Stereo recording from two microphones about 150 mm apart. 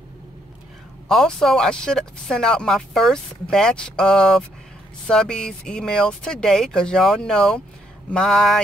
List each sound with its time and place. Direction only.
1.0 s speech: 5° left (ahead or behind)